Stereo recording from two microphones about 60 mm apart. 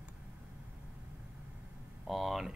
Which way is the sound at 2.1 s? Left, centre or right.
Centre.